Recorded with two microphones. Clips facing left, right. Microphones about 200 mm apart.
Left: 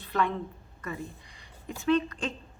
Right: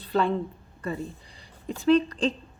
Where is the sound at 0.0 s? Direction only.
30° right (ahead or behind).